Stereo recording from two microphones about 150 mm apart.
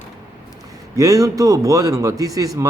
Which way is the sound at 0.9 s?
25° right (ahead or behind).